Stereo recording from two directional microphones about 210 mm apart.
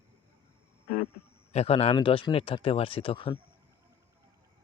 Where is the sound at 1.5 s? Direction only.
30° left (ahead or behind).